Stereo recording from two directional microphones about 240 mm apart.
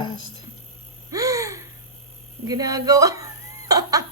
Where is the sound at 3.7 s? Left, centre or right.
Centre.